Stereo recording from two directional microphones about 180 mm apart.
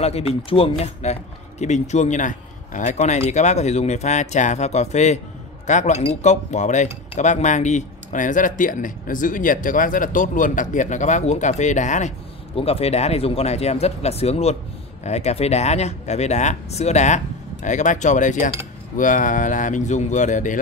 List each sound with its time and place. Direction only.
0.0 s speech: 35° left (ahead or behind)